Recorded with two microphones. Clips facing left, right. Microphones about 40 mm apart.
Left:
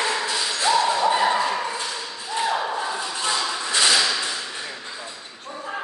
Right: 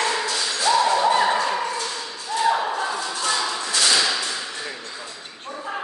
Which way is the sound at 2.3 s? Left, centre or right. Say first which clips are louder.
Right 4 dB; left.